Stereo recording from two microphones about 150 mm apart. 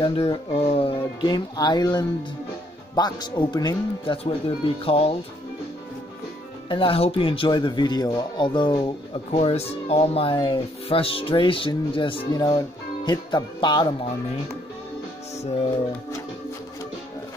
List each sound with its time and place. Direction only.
0.0 s speech: 35° left (ahead or behind)
6.7 s speech: 35° left (ahead or behind)